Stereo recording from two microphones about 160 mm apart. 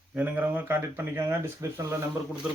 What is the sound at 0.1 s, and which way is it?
Speech, 10° right (ahead or behind).